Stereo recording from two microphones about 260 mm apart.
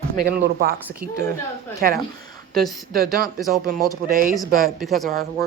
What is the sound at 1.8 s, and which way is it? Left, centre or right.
Speech, right.